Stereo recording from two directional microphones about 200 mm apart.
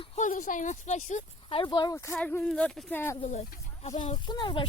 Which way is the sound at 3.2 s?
35° left (ahead or behind).